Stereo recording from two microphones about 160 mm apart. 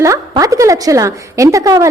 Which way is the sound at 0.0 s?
20° right (ahead or behind).